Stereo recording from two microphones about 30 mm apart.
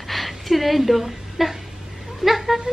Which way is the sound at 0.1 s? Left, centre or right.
Centre.